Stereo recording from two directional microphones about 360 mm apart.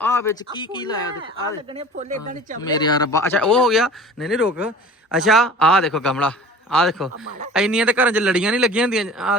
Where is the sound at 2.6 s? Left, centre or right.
Centre.